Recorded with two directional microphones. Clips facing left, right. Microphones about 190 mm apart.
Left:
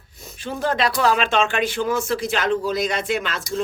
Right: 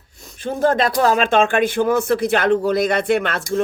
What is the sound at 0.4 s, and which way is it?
Speech, 50° right (ahead or behind).